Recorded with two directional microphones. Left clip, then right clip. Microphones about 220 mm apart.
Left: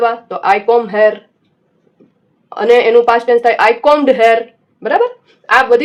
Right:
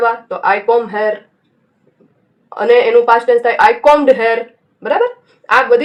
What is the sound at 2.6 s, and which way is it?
Speech, 40° left (ahead or behind).